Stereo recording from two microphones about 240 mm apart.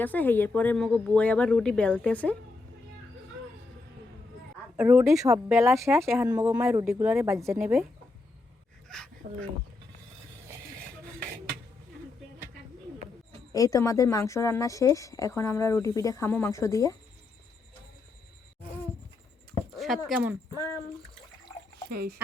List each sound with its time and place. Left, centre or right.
0.0 s speech: centre
4.8 s speech: centre
13.5 s speech: centre
19.7 s speech: centre
21.8 s speech: right